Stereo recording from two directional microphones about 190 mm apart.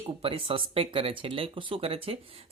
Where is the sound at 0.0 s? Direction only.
30° right (ahead or behind).